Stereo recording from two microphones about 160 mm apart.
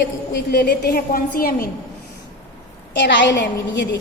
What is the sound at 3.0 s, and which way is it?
Speech, 90° left.